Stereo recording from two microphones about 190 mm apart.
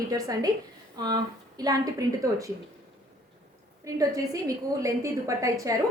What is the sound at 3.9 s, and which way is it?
A woman's voice, 20° right (ahead or behind).